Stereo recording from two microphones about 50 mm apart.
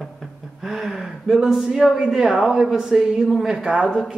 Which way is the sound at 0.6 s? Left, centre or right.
Centre.